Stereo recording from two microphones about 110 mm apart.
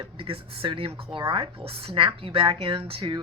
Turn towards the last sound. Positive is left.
turn(degrees=-50)  # may be behind; listen again after turning